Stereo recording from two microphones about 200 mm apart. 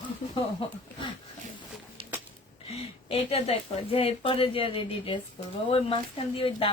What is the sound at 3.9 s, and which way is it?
Speech, 30° left (ahead or behind).